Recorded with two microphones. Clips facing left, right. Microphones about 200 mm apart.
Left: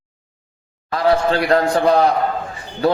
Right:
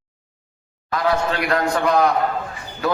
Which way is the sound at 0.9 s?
30° left (ahead or behind).